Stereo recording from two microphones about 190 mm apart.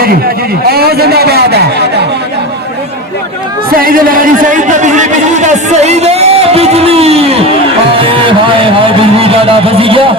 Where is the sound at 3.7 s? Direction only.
50° right (ahead or behind); by 7.3 s 30° right (ahead or behind).